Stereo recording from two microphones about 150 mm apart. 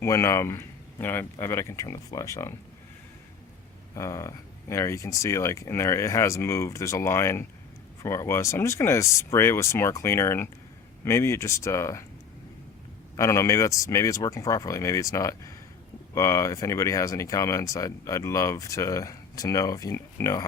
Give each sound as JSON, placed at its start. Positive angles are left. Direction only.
{"t": 0.0, "sound": "speech", "side_deg": 20}
{"t": 3.9, "sound": "speech", "side_deg": 20}
{"t": 13.1, "sound": "speech", "side_deg": 20}